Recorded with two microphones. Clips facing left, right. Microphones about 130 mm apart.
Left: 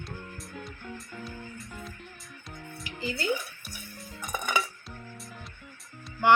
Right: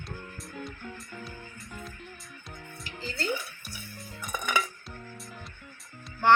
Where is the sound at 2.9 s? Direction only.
15° left (ahead or behind).